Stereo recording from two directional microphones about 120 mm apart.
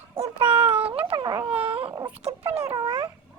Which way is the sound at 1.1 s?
40° right (ahead or behind).